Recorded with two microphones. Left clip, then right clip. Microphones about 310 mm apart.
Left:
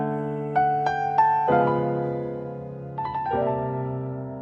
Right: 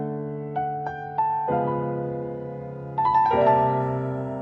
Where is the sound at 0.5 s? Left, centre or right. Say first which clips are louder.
Left 7 dB; left.